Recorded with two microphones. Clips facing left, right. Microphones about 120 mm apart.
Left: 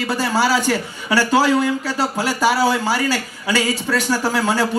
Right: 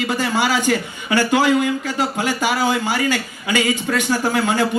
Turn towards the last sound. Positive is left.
turn(degrees=35)  # may be behind; listen again after turning